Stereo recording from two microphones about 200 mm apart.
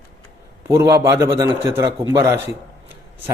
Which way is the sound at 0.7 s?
15° right (ahead or behind).